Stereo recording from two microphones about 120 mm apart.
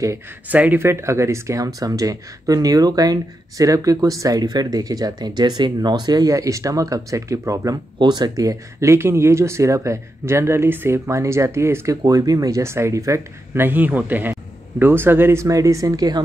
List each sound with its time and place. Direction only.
0.5 s speech: 15° right (ahead or behind); by 16.2 s 30° right (ahead or behind)